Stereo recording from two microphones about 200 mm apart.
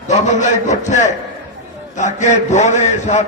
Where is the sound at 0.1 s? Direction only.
35° left (ahead or behind).